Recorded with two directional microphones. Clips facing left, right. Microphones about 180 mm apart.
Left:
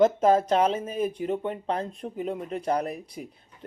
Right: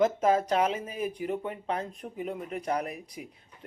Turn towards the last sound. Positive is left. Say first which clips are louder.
# left 4 dB
turn(degrees=30)  # may be behind; listen again after turning